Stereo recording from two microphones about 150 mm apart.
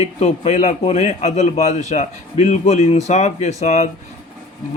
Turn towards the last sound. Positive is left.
turn(degrees=50)  # may be behind; listen again after turning